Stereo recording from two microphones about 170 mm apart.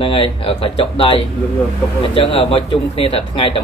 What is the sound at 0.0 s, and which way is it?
Speech, 30° left (ahead or behind).